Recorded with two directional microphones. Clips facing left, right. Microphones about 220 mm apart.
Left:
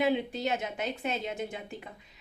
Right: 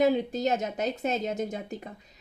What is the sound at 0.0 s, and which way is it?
A woman's voice, 40° right (ahead or behind).